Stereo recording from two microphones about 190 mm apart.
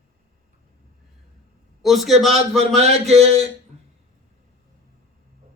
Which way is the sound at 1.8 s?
Centre (ahead or behind).